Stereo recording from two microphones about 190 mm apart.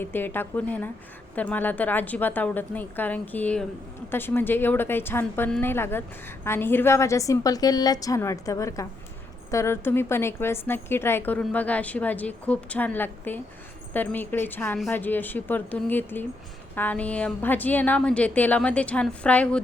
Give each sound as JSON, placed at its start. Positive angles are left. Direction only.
{"t": 0.0, "sound": "a woman's voice", "side_deg": 10}